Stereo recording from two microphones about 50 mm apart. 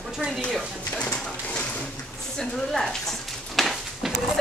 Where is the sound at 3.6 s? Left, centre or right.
Centre.